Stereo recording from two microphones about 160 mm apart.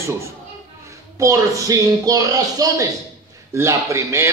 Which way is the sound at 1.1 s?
20° right (ahead or behind).